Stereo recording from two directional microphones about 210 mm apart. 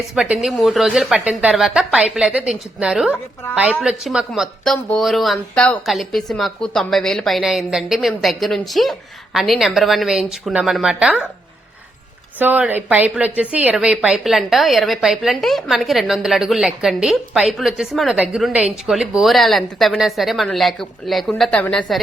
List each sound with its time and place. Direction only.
0.0 s a woman's voice: 5° right (ahead or behind)
12.4 s a woman's voice: 10° right (ahead or behind)